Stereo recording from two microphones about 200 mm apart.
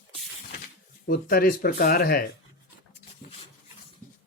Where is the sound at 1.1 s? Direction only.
45° left (ahead or behind).